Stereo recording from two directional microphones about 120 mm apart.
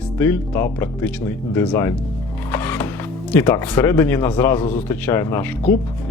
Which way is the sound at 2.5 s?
15° left (ahead or behind).